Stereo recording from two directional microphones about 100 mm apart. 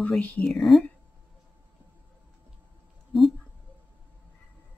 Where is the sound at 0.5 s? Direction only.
Centre (ahead or behind).